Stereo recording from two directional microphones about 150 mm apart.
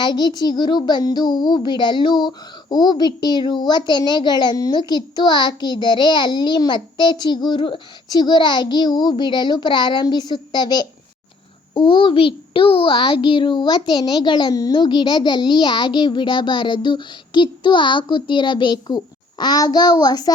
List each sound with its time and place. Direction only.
0.0 s child singing: 30° left (ahead or behind)
11.7 s a child's voice: 35° left (ahead or behind)